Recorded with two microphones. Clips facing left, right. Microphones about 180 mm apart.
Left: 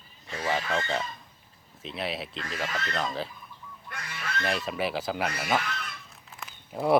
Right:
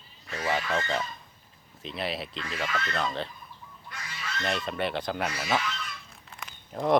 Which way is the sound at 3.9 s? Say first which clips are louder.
Left 3 dB; 60° left (ahead or behind).